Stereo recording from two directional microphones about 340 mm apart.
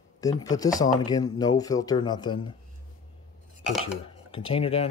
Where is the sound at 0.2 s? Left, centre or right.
Centre.